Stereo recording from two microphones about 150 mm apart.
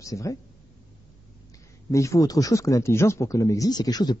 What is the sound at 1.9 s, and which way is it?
Speech, 20° left (ahead or behind).